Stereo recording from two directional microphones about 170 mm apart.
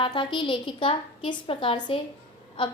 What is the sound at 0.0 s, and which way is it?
A woman's voice, 30° left (ahead or behind).